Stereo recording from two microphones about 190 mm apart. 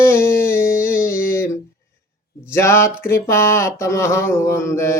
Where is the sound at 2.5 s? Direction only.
15° left (ahead or behind).